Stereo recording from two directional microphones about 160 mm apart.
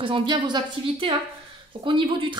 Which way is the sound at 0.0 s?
30° right (ahead or behind).